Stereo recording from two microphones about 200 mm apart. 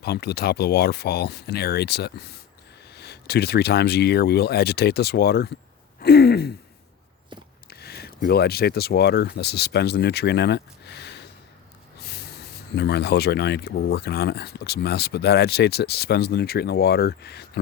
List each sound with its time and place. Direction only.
0.0 s speech: 55° left (ahead or behind)
7.7 s speech: 55° left (ahead or behind)